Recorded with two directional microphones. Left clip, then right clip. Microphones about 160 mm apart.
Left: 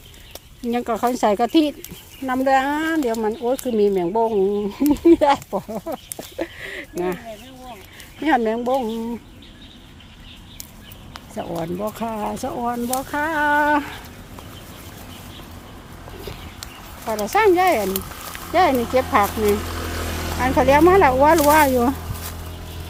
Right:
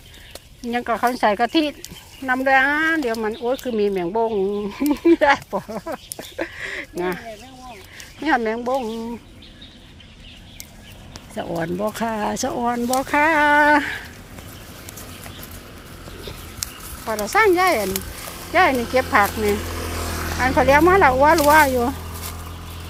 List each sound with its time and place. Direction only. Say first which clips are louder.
0.7 s speech: right 1 dB; 35° left (ahead or behind); by 3.6 s 15° left (ahead or behind)
3.8 s speech: left 3 dB; 30° left (ahead or behind)
4.3 s speech: left 2 dB; 10° left (ahead or behind)
4.7 s speech: left 2 dB; 30° left (ahead or behind)
5.5 s speech: even; 10° left (ahead or behind)
5.7 s speech: left 1 dB; 20° left (ahead or behind)
8.4 s speech: left 2 dB; 30° left (ahead or behind)
8.8 s speech: left 2 dB; 10° left (ahead or behind)
11.4 s speech: right 3 dB; 10° right (ahead or behind)
13.4 s speech: left 1 dB; 10° right (ahead or behind)
17.1 s speech: even; 20° left (ahead or behind)
19.5 s a sound: left 1 dB; centre (ahead or behind)
19.9 s a sound: even; 15° right (ahead or behind)
20.4 s speech: even; 25° left (ahead or behind)